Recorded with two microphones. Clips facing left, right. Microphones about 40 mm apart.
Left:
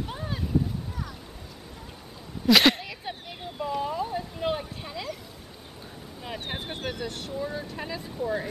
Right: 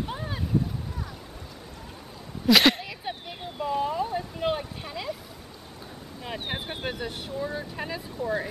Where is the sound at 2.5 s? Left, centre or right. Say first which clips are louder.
Even; centre.